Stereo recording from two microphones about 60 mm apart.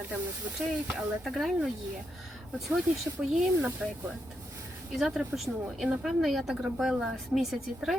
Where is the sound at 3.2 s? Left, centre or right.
Right.